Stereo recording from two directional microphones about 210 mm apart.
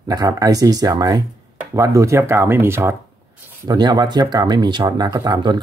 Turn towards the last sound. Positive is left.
turn(degrees=-20)  # may be behind; listen again after turning